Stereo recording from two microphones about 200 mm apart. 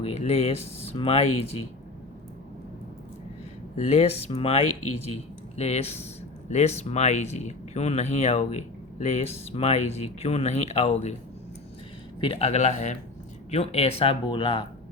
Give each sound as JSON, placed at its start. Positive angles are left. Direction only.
{"t": 0.0, "sound": "speech", "side_deg": 30}
{"t": 3.8, "sound": "speech", "side_deg": 35}
{"t": 4.6, "sound": "speech", "side_deg": 90}
{"t": 5.5, "sound": "speech", "side_deg": 30}
{"t": 12.2, "sound": "speech", "side_deg": 30}